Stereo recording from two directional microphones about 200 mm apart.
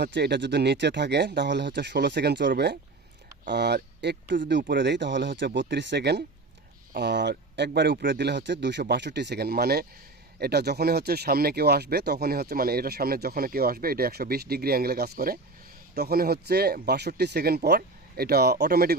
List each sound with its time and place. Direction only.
0.0 s speech: 60° right (ahead or behind)